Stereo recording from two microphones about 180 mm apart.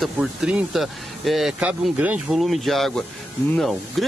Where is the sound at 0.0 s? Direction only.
Centre (ahead or behind).